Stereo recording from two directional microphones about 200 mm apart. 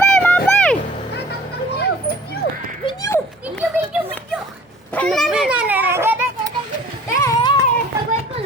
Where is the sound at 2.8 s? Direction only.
15° left (ahead or behind).